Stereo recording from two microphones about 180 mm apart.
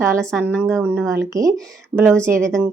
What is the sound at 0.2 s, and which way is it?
Speech, 5° left (ahead or behind).